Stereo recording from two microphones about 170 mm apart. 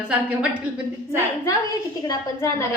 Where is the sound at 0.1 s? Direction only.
10° right (ahead or behind).